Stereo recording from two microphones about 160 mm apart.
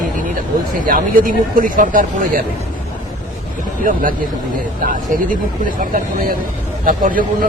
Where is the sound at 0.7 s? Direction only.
60° right (ahead or behind).